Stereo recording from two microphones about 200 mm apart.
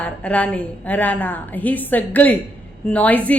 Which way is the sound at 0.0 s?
5° left (ahead or behind).